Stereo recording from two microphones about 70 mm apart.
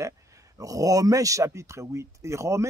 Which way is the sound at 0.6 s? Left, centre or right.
Right.